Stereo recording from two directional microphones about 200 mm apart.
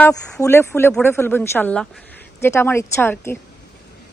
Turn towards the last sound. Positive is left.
turn(degrees=10)  # may be behind; listen again after turning